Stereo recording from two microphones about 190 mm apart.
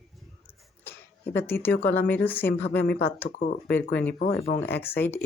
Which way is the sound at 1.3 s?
10° left (ahead or behind).